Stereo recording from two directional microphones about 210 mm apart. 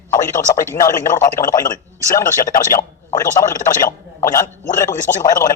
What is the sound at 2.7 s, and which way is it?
Speech, 15° left (ahead or behind).